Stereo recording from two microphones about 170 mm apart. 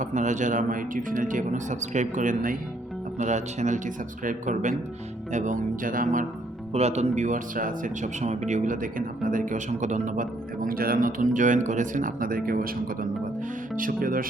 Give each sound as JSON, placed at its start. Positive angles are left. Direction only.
{"t": 0.0, "sound": "speech", "side_deg": -45}
{"t": 6.7, "sound": "speech", "side_deg": -40}